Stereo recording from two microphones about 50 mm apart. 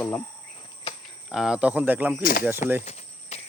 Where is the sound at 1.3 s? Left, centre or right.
Centre.